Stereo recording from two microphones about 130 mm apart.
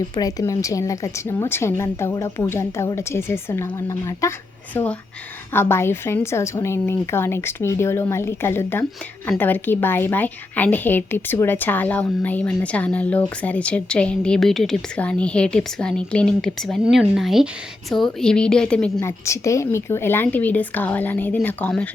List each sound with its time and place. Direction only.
0.2 s speech: 30° left (ahead or behind)
4.7 s a woman's voice: 10° left (ahead or behind)
18.9 s a woman's voice: 20° left (ahead or behind)